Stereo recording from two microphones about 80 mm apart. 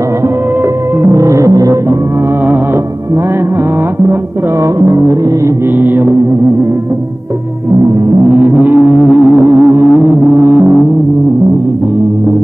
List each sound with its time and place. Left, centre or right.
1.0 s music: right
4.7 s music: right
5.8 s music: right
8.6 s a sound: right
9.4 s music: right